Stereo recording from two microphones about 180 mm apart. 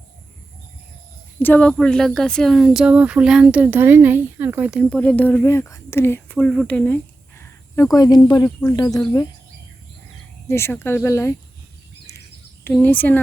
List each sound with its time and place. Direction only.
1.4 s speech: 10° left (ahead or behind); by 4.9 s 5° right (ahead or behind)
4.9 s speech: 5° left (ahead or behind)
10.5 s speech: 15° left (ahead or behind)
12.6 s speech: 10° left (ahead or behind)